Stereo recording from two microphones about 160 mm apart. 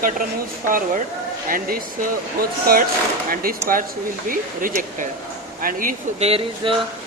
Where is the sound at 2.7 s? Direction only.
70° right (ahead or behind).